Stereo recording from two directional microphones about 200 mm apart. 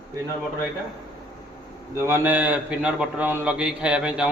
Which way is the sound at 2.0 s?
10° right (ahead or behind).